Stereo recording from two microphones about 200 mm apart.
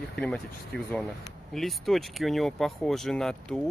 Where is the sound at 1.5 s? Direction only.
Centre (ahead or behind).